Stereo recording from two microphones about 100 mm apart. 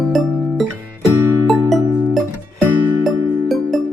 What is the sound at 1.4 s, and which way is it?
Music, centre (ahead or behind).